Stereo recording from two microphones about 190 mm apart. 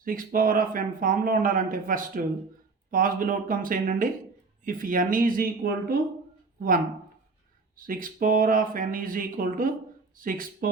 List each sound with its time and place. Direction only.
0.0 s speech: 45° right (ahead or behind)
7.8 s speech: 45° right (ahead or behind)